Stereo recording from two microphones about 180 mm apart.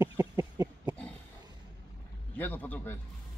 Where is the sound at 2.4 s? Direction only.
10° left (ahead or behind).